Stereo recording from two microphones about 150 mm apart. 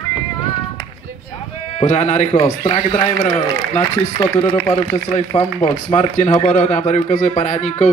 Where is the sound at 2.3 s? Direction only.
25° left (ahead or behind).